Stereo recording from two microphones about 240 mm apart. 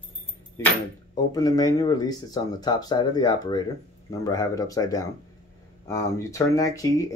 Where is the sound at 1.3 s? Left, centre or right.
Centre.